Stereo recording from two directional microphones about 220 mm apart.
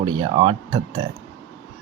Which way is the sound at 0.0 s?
20° right (ahead or behind).